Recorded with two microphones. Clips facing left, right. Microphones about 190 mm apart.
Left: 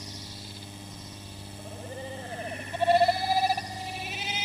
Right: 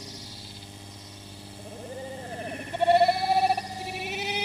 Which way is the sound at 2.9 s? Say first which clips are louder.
Right 2 dB; 60° right (ahead or behind).